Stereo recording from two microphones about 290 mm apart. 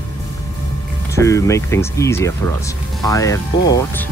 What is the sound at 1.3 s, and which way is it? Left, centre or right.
Speech, centre.